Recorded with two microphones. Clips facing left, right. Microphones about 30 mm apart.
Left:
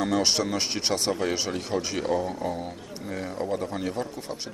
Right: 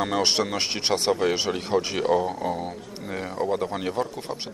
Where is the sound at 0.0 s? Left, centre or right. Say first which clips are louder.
Right 1 dB; right.